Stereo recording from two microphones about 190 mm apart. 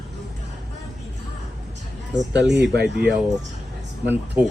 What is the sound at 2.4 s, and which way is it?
Speech, 65° right (ahead or behind).